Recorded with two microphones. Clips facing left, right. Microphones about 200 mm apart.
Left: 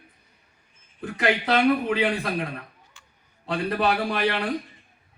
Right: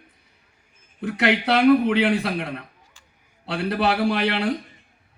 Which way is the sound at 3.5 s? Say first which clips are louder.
Right 1 dB; 75° right (ahead or behind).